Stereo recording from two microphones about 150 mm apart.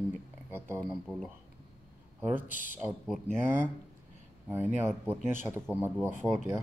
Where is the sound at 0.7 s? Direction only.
5° left (ahead or behind).